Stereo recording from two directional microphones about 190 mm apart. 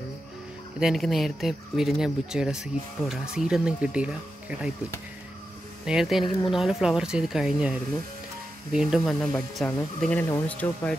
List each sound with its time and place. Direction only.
0.7 s speech: centre (ahead or behind)
5.9 s speech: centre (ahead or behind)
8.7 s speech: centre (ahead or behind)